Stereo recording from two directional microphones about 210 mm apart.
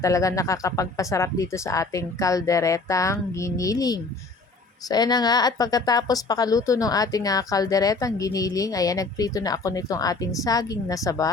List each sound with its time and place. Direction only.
0.0 s a woman's voice: 15° left (ahead or behind)